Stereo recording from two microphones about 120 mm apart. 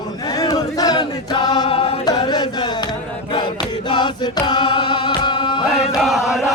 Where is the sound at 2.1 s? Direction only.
35° left (ahead or behind).